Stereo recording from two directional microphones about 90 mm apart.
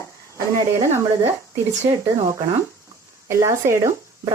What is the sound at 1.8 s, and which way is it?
Speech, 30° right (ahead or behind).